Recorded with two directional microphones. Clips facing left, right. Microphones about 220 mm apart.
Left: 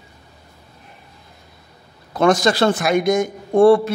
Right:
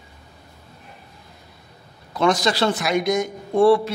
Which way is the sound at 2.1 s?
50° left (ahead or behind).